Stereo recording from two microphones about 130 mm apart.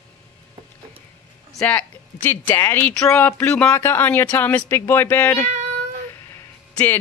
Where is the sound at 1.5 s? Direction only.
10° left (ahead or behind).